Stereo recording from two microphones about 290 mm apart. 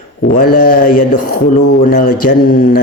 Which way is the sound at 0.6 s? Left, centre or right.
Left.